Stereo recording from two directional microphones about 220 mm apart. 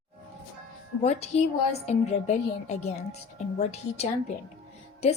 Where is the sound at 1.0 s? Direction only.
30° left (ahead or behind).